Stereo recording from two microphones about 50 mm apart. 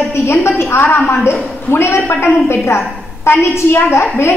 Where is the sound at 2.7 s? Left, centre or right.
Left.